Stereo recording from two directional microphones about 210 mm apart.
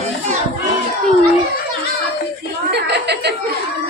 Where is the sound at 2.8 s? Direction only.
55° right (ahead or behind).